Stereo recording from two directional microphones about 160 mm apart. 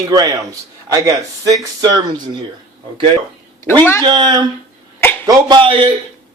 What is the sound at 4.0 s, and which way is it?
Speech, 30° right (ahead or behind).